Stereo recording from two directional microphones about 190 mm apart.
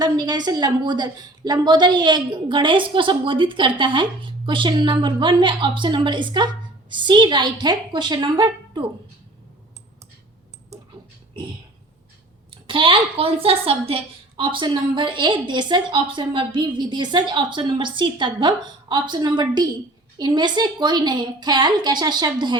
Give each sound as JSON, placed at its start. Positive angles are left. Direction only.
{"t": 0.0, "sound": "a woman's voice", "side_deg": -20}
{"t": 11.3, "sound": "a sound", "side_deg": -25}
{"t": 12.5, "sound": "a woman's voice", "side_deg": -25}